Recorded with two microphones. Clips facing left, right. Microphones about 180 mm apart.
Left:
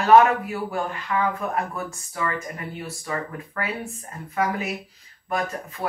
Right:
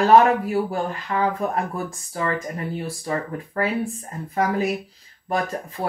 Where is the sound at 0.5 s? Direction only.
30° right (ahead or behind).